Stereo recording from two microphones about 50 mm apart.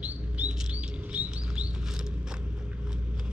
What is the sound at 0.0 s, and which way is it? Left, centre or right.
Chirp, right.